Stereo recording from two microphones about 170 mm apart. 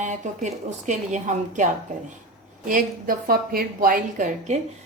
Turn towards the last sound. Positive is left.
turn(degrees=-50)  # may be behind; listen again after turning